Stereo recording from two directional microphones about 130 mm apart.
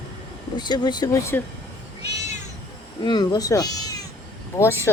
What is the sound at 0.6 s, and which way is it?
Speech, 35° left (ahead or behind).